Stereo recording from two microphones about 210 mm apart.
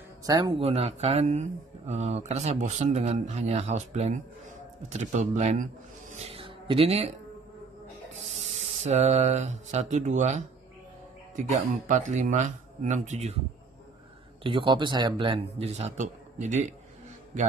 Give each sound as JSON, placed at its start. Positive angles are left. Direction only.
{"t": 0.2, "sound": "speech", "side_deg": -20}
{"t": 8.8, "sound": "speech", "side_deg": -30}
{"t": 14.4, "sound": "speech", "side_deg": -25}